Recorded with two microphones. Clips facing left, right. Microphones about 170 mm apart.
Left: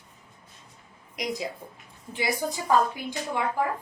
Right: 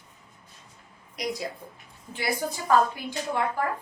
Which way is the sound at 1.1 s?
15° left (ahead or behind).